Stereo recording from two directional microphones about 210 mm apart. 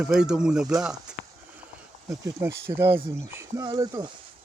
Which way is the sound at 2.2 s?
10° right (ahead or behind).